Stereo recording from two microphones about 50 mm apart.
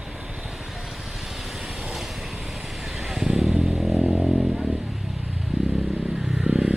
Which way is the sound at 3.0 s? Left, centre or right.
Centre.